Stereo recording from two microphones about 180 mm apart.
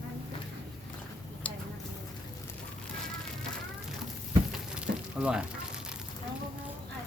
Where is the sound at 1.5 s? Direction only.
5° left (ahead or behind).